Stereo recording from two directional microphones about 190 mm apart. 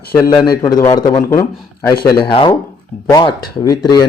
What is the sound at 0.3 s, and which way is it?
Speech, 20° left (ahead or behind).